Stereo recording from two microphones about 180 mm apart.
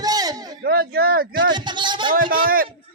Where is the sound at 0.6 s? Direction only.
60° right (ahead or behind).